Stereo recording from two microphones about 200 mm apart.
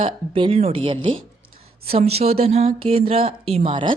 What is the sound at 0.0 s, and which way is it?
Speech, 25° right (ahead or behind).